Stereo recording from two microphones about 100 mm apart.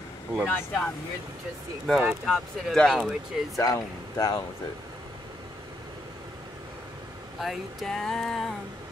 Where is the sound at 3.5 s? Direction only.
35° left (ahead or behind).